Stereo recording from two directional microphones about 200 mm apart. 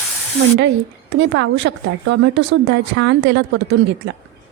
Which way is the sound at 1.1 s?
65° right (ahead or behind).